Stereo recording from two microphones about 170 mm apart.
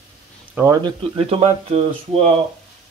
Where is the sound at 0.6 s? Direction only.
10° right (ahead or behind).